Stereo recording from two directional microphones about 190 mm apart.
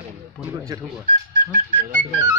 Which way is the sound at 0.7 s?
20° right (ahead or behind).